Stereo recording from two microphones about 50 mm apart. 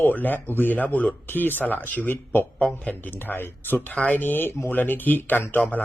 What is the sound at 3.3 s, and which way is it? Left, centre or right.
Speech, left.